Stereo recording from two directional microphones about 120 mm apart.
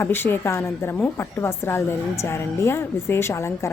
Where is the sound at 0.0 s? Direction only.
20° left (ahead or behind).